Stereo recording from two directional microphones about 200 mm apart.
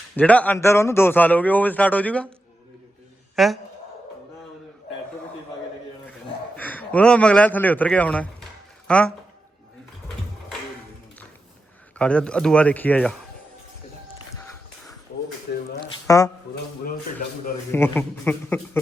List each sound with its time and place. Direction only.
0.2 s a man's voice: 5° left (ahead or behind)
3.3 s a man's voice: centre (ahead or behind)
6.6 s a man's voice: 10° left (ahead or behind)
11.9 s a man's voice: 5° left (ahead or behind)
15.5 s a sound: 50° left (ahead or behind)
15.8 s a sound: 15° left (ahead or behind)
17.7 s a man's voice: 10° left (ahead or behind)